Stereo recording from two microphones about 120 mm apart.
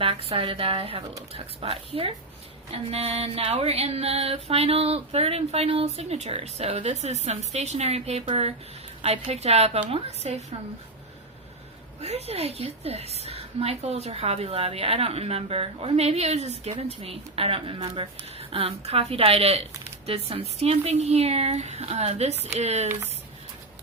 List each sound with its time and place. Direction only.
0.0 s a woman's voice: 50° right (ahead or behind)
12.0 s a woman's voice: 60° right (ahead or behind)